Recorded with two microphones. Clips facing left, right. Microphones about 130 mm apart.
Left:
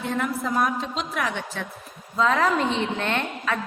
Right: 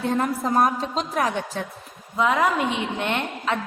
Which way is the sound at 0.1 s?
40° right (ahead or behind).